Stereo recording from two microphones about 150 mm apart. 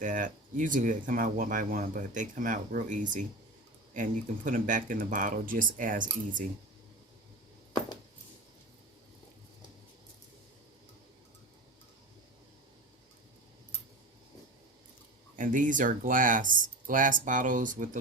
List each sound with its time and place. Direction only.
0.0 s speech: 60° right (ahead or behind)
7.7 s a sound: 30° left (ahead or behind)
15.4 s speech: 60° right (ahead or behind)